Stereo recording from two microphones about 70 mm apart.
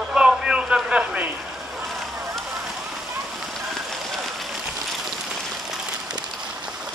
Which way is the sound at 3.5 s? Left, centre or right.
Centre.